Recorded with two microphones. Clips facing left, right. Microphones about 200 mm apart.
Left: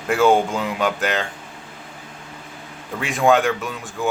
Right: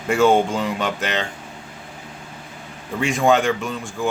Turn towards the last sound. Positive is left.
turn(degrees=0)  # may be behind; listen again after turning